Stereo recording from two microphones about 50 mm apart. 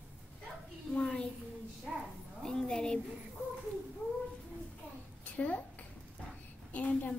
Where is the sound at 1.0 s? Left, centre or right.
Centre.